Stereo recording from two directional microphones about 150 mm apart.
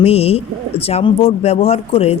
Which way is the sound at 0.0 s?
45° left (ahead or behind).